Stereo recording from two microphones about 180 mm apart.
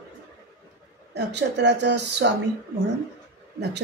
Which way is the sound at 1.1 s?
70° right (ahead or behind).